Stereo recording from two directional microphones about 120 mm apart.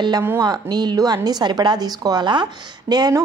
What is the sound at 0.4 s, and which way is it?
A woman's voice, 35° right (ahead or behind).